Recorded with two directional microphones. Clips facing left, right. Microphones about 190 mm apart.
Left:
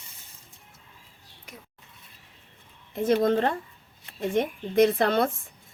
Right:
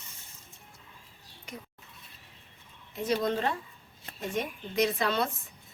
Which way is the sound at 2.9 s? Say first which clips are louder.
Left 7 dB; 50° left (ahead or behind).